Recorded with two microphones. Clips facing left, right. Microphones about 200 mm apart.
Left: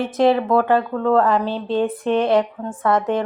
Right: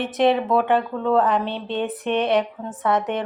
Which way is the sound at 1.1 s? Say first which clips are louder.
Left 2 dB; 20° right (ahead or behind).